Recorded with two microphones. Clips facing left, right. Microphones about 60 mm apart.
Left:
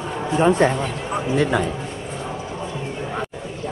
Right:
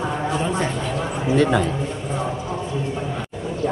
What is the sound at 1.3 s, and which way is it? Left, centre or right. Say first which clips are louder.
Speech: right 2 dB; centre.